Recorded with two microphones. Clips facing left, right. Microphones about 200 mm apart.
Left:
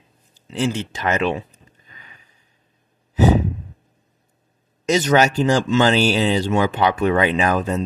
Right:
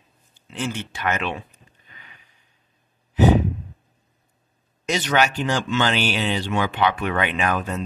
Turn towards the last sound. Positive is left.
turn(degrees=35)  # may be behind; listen again after turning